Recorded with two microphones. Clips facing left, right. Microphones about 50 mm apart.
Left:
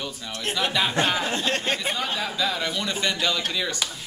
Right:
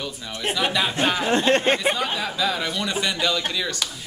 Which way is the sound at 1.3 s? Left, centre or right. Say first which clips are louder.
Right 7 dB; right.